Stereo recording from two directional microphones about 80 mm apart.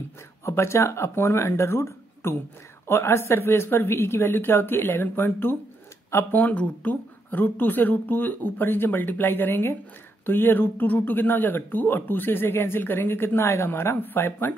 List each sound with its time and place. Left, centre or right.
0.5 s speech: left